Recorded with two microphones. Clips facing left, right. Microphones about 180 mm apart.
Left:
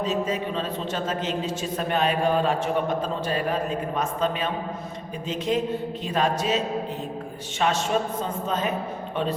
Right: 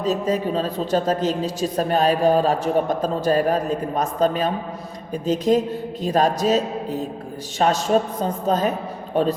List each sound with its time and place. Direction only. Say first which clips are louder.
0.0 s a man's voice: right 4 dB; 40° right (ahead or behind)